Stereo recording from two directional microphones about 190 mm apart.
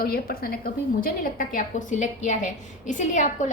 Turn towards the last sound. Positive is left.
turn(degrees=40)  # may be behind; listen again after turning